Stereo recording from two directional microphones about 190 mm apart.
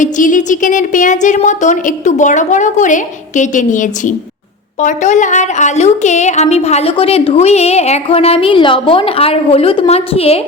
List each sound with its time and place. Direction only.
0.0 s a woman's voice: 40° left (ahead or behind)